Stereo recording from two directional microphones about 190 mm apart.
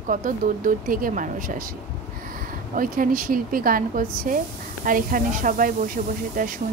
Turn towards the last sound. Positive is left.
turn(degrees=-45)  # may be behind; listen again after turning